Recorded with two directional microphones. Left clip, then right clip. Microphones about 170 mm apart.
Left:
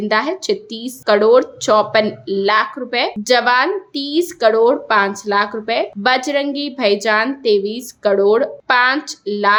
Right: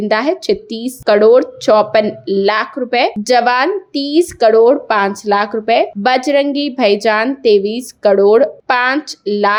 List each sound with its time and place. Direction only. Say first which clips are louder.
0.1 s speech: right 3 dB; 25° right (ahead or behind)